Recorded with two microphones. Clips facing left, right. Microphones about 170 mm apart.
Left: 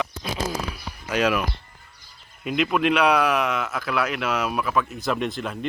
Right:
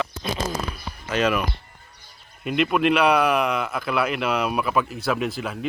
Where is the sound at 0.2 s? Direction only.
5° left (ahead or behind).